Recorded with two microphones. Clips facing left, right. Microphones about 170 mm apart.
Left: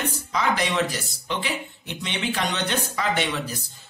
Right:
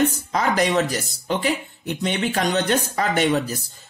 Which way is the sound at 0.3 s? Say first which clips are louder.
Right 4 dB; 45° right (ahead or behind).